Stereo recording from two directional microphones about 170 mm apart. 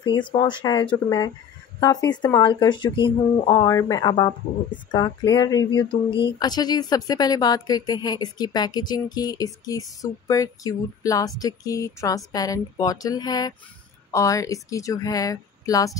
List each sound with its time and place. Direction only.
0.4 s speech: 25° left (ahead or behind)